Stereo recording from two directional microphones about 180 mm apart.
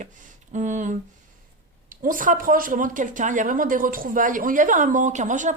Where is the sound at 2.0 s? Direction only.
50° right (ahead or behind).